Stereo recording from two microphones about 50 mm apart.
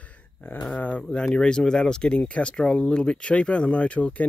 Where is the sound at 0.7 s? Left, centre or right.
Left.